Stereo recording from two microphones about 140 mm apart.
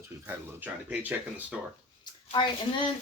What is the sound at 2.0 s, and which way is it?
Speech, 35° left (ahead or behind).